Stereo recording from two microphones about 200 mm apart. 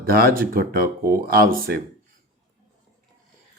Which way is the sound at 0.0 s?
50° right (ahead or behind).